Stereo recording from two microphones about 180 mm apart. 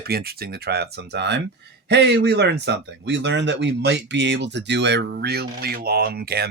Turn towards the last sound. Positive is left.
turn(degrees=-60)  # may be behind; listen again after turning